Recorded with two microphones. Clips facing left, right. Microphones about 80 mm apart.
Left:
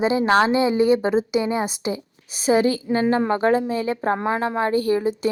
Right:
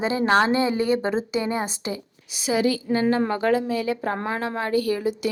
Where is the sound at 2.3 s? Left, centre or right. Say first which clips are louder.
Left 4 dB; left.